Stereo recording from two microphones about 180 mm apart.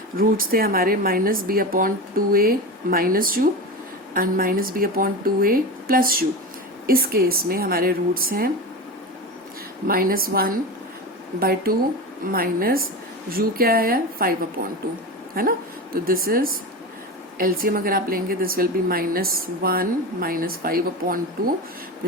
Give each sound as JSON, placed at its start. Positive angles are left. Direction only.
{"t": 0.5, "sound": "a woman's voice", "side_deg": -55}
{"t": 9.8, "sound": "a woman's voice", "side_deg": -55}